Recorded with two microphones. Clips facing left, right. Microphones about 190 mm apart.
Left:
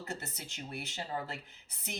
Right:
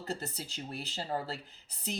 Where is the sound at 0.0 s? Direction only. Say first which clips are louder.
Right 4 dB; 35° right (ahead or behind).